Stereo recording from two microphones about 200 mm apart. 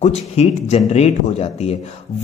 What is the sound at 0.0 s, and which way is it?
A man's voice, 30° left (ahead or behind).